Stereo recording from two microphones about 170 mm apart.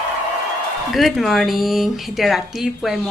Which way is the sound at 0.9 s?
Centre (ahead or behind).